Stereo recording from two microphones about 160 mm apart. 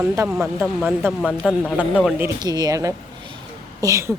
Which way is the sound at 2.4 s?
25° right (ahead or behind).